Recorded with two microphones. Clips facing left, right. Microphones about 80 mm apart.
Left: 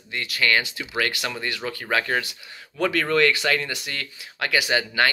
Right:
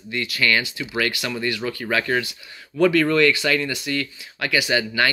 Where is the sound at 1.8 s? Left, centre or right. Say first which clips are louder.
Right 1 dB; left.